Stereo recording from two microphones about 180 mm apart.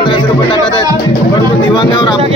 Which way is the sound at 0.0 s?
30° left (ahead or behind).